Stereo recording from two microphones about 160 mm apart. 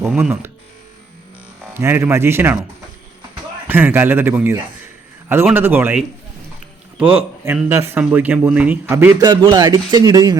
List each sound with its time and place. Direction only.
0.0 s speech: 10° right (ahead or behind)
1.6 s speech: 15° right (ahead or behind)
3.7 s speech: 10° right (ahead or behind)
5.5 s speech: 10° right (ahead or behind)
7.2 s speech: 10° right (ahead or behind)
9.2 s speech: 25° right (ahead or behind)